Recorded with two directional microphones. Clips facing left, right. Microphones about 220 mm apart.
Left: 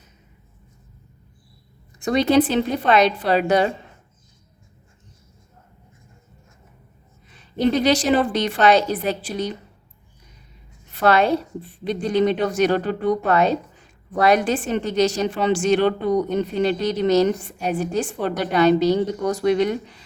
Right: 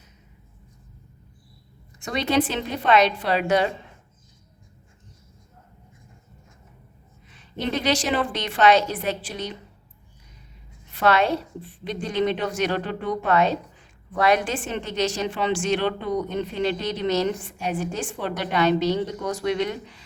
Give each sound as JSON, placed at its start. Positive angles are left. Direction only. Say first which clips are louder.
{"t": 2.0, "sound": "a woman's voice", "louder": "left 6 dB", "side_deg": 40}
{"t": 7.3, "sound": "a woman's voice", "louder": "left 8 dB", "side_deg": 40}
{"t": 10.9, "sound": "a woman's voice", "louder": "left 3 dB", "side_deg": 40}